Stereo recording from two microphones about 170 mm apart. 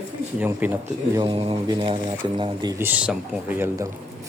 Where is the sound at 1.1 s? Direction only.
30° right (ahead or behind).